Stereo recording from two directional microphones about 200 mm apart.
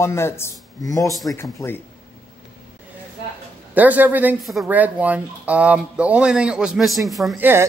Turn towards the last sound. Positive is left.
turn(degrees=-10)  # may be behind; listen again after turning